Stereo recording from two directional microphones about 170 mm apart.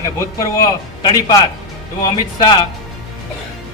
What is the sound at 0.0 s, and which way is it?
A man's voice, 20° left (ahead or behind).